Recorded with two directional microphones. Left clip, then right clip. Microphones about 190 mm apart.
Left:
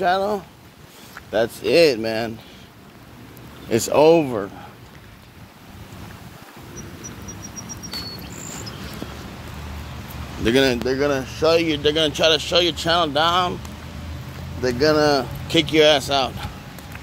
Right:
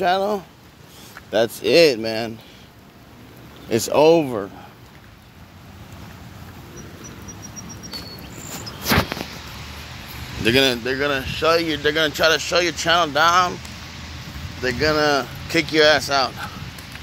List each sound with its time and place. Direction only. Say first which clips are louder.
0.0 s speech: even; 35° right (ahead or behind)
2.0 s speech: left 1 dB; 20° right (ahead or behind)
3.6 s speech: even; 15° right (ahead or behind)
10.4 s speech: right 1 dB; centre (ahead or behind)
15.0 s speech: left 1 dB; centre (ahead or behind)